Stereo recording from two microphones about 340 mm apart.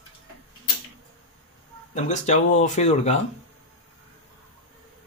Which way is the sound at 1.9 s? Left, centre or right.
Left.